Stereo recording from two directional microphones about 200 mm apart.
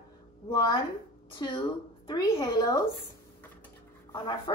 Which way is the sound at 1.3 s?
25° left (ahead or behind).